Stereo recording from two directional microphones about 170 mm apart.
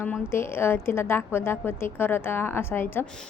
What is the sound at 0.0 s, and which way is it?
A woman's voice, 15° left (ahead or behind).